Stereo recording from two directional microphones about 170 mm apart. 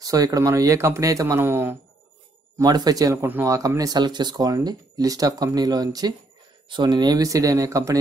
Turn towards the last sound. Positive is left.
turn(degrees=-20)  # may be behind; listen again after turning